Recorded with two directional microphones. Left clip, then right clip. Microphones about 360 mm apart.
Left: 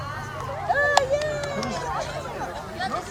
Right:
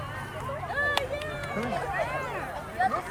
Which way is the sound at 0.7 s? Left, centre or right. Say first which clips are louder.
Left 8 dB; left.